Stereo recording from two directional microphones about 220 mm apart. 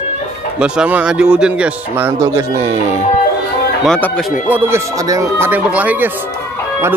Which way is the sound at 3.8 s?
5° left (ahead or behind).